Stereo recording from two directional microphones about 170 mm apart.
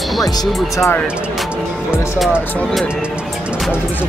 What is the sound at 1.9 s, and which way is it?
Speech, 5° right (ahead or behind).